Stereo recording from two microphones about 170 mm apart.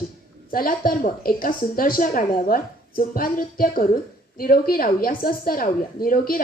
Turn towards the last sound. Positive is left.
turn(degrees=55)  # may be behind; listen again after turning